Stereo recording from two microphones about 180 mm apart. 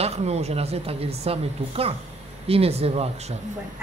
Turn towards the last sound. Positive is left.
turn(degrees=-35)  # may be behind; listen again after turning